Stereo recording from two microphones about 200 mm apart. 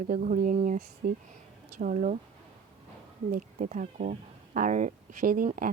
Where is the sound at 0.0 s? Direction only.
40° right (ahead or behind).